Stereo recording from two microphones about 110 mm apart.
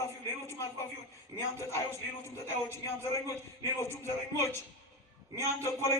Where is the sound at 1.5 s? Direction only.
25° left (ahead or behind).